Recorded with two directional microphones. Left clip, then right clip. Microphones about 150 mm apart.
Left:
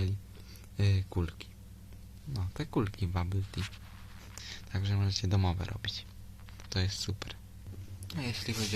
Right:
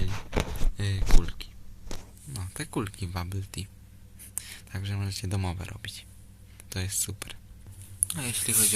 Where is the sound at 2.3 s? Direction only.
10° left (ahead or behind).